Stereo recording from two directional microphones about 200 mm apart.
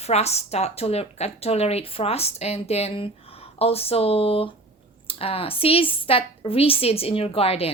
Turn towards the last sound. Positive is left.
turn(degrees=30)  # may be behind; listen again after turning